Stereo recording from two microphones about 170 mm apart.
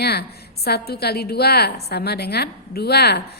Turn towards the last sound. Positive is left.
turn(degrees=70)  # may be behind; listen again after turning